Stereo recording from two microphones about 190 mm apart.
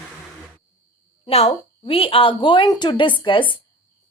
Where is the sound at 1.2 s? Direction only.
30° left (ahead or behind).